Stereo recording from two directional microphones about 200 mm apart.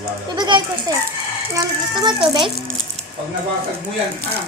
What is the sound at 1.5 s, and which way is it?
Speech, 20° right (ahead or behind).